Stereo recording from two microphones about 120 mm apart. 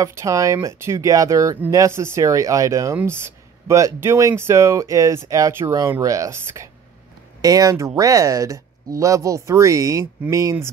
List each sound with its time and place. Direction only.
0.0 s speech: 25° right (ahead or behind)